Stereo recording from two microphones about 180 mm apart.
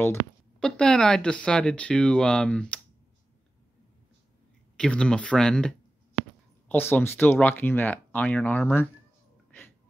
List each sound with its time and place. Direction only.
0.6 s speech: 5° left (ahead or behind)
4.7 s speech: 5° left (ahead or behind)